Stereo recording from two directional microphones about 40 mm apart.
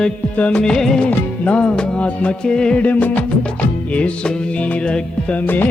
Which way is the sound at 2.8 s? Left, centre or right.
Left.